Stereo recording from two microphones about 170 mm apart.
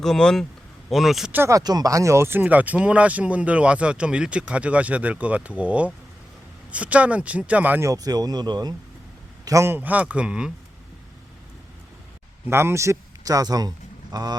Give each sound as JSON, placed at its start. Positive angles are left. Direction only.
{"t": 0.0, "sound": "speech", "side_deg": 5}
{"t": 1.4, "sound": "speech", "side_deg": -20}
{"t": 12.5, "sound": "speech", "side_deg": -15}